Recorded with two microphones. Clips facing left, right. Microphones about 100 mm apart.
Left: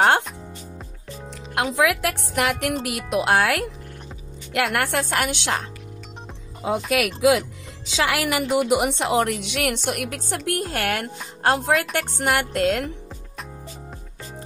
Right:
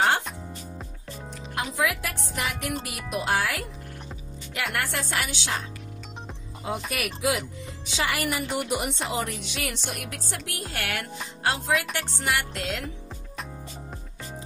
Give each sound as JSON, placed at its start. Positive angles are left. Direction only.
{"t": 1.5, "sound": "speech", "side_deg": 90}
{"t": 4.7, "sound": "a woman's voice", "side_deg": 55}
{"t": 6.9, "sound": "speech", "side_deg": 90}
{"t": 11.4, "sound": "music", "side_deg": 50}